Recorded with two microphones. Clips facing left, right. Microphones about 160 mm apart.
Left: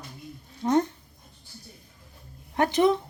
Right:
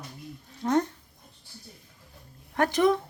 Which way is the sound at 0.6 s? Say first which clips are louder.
Left 2 dB; 20° left (ahead or behind).